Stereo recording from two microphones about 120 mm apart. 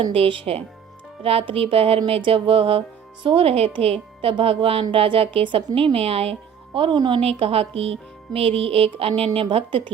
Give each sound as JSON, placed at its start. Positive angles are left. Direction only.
{"t": 0.0, "sound": "music", "side_deg": -50}
{"t": 6.7, "sound": "music", "side_deg": -40}
{"t": 7.2, "sound": "music", "side_deg": -55}